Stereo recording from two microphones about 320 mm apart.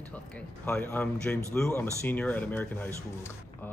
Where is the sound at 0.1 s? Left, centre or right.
Centre.